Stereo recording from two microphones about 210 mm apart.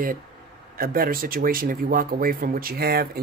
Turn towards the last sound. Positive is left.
turn(degrees=-45)  # may be behind; listen again after turning